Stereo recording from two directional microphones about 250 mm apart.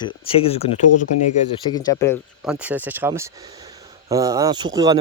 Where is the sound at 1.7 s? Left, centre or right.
Centre.